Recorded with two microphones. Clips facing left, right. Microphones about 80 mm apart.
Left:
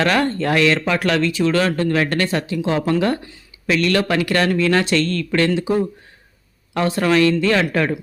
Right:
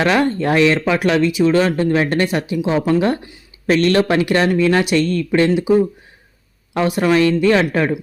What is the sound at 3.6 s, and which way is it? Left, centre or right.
Speech, right.